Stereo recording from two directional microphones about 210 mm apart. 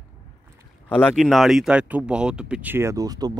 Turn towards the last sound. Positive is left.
turn(degrees=-20)  # may be behind; listen again after turning